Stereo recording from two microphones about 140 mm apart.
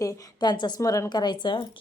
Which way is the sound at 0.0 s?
30° left (ahead or behind).